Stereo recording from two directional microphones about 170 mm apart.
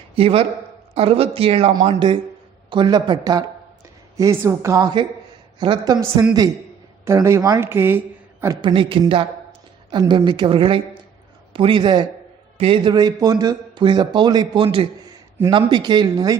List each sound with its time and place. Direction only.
0.2 s a man's voice: 35° right (ahead or behind); by 8.5 s 15° right (ahead or behind)
8.6 s a woman's voice: 30° right (ahead or behind)